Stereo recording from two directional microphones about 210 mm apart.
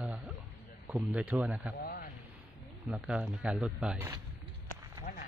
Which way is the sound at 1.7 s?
45° left (ahead or behind).